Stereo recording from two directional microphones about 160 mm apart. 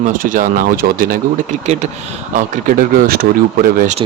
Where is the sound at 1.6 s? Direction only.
45° right (ahead or behind).